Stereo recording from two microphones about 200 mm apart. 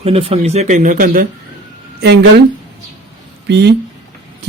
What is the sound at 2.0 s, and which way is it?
Speech, 60° right (ahead or behind).